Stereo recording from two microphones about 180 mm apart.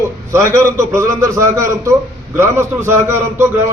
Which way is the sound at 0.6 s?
15° right (ahead or behind).